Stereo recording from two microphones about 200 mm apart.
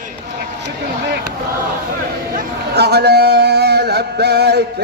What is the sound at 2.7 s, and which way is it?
Male singing, 55° right (ahead or behind).